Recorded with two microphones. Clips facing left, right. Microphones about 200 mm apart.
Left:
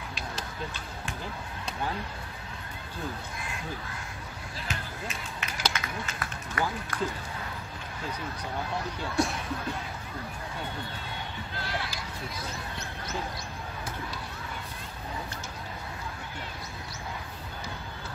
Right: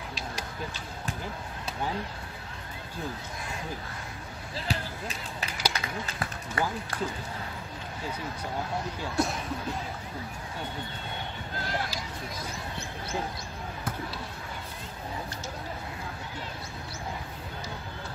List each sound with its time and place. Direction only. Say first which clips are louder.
4.6 s basketball bounce: right 3 dB; 35° right (ahead or behind)
5.7 s speech: right 1 dB; 30° right (ahead or behind)
9.2 s speech: even; centre (ahead or behind)